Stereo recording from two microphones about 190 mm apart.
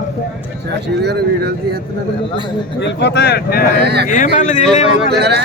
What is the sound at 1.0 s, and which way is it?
Speech, 55° right (ahead or behind).